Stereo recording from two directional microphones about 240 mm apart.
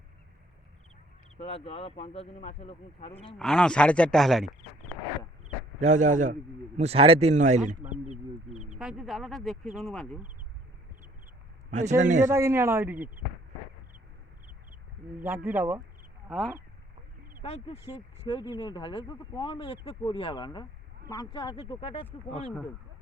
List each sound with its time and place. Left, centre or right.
1.4 s speech: left
3.3 s speech: centre
5.8 s a man's voice: right
8.5 s a sound: right
8.8 s speech: centre
11.7 s a man's voice: right
12.3 s speech: centre
15.4 s speech: centre
17.4 s speech: left